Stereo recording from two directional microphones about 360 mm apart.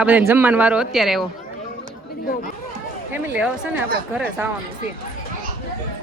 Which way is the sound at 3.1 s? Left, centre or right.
Centre.